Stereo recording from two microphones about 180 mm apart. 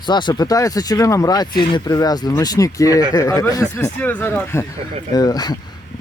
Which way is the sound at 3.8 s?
5° left (ahead or behind).